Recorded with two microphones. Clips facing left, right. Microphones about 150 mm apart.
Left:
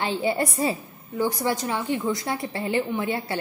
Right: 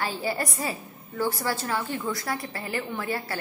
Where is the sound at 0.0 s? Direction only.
25° left (ahead or behind).